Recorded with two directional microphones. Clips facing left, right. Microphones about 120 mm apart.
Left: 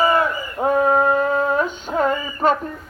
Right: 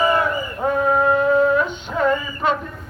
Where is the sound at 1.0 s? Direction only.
40° left (ahead or behind).